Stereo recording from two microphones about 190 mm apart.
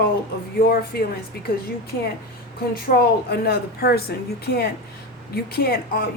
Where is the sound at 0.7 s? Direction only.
50° left (ahead or behind).